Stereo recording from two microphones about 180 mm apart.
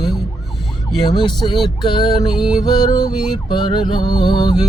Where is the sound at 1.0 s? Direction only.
25° left (ahead or behind).